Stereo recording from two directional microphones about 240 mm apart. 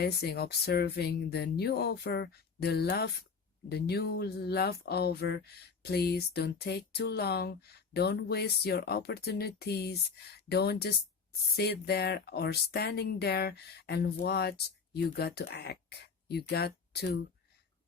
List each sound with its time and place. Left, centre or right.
0.0 s speech: left